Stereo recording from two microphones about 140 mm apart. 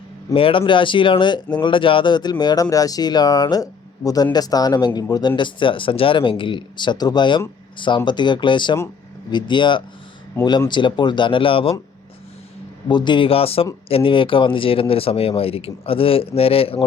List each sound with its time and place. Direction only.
0.3 s speech: 40° left (ahead or behind)
12.9 s speech: 35° left (ahead or behind)